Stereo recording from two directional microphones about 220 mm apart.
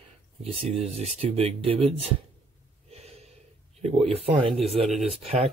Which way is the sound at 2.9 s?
30° right (ahead or behind).